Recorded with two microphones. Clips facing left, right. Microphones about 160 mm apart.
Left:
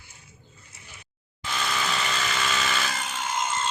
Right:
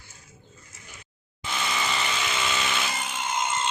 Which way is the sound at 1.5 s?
Centre (ahead or behind).